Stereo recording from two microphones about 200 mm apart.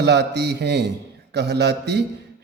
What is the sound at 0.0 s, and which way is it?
A man's voice, 55° right (ahead or behind).